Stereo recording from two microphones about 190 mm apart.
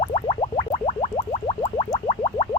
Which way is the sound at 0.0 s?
30° left (ahead or behind).